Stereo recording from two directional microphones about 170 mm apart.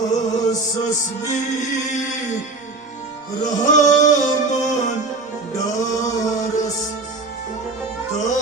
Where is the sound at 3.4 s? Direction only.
45° left (ahead or behind).